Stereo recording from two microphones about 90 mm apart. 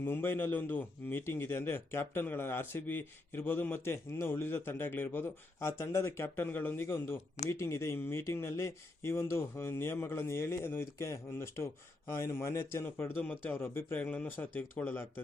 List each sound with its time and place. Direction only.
0.0 s a man's voice: 25° left (ahead or behind)